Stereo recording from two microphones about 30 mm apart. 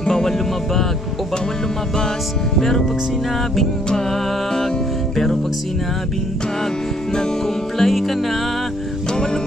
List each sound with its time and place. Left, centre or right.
0.0 s music: centre
5.1 s music: centre
7.2 s music: centre